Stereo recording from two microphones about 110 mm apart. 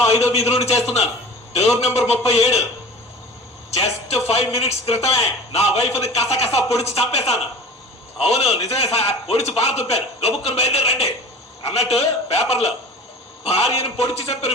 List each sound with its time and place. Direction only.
0.0 s a sound: 25° left (ahead or behind)
0.3 s speech: 70° left (ahead or behind)
3.7 s a man's voice: 75° left (ahead or behind)